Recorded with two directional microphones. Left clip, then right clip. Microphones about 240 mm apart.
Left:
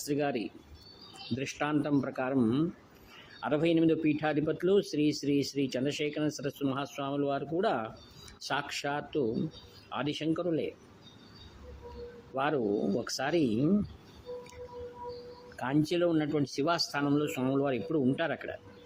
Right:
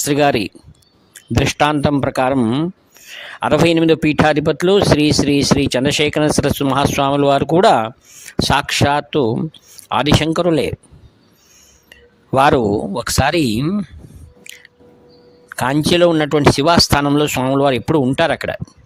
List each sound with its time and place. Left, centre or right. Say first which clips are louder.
0.0 s speech: right 17 dB; right
12.4 s speech: right 17 dB; right
15.5 s speech: right 15 dB; right